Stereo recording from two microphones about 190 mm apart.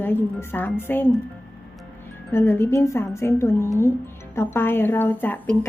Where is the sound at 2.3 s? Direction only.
10° left (ahead or behind).